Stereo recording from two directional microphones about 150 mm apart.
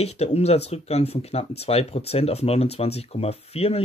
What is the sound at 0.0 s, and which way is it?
Speech, 45° left (ahead or behind).